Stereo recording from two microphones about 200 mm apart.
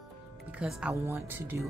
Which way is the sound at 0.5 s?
5° right (ahead or behind).